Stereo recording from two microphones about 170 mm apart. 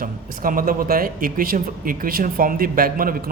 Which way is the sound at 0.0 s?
55° right (ahead or behind).